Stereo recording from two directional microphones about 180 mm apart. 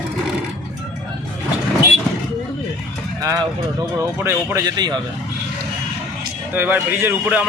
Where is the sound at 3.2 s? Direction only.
20° right (ahead or behind).